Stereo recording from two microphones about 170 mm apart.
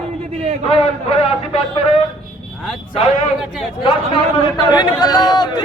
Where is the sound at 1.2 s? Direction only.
35° left (ahead or behind).